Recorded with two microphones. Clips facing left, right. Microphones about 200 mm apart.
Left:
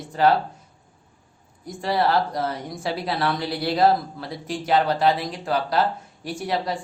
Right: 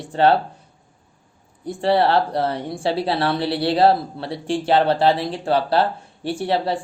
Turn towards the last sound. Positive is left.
turn(degrees=-30)  # may be behind; listen again after turning